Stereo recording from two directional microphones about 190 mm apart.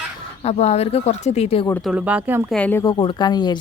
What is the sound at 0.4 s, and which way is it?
Speech, 35° left (ahead or behind).